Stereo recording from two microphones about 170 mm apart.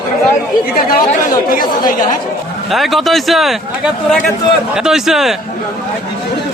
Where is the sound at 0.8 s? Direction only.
60° left (ahead or behind).